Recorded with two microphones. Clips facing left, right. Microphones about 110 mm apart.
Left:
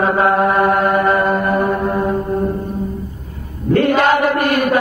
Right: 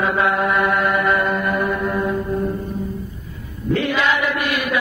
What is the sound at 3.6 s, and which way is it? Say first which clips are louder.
Chant: left 6 dB; 50° left (ahead or behind).